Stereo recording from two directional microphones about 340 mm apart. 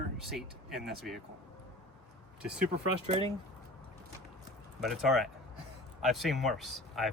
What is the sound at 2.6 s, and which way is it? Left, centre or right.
Speech, right.